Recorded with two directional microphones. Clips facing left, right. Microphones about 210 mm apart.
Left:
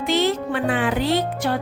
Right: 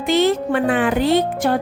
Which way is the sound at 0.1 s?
50° right (ahead or behind).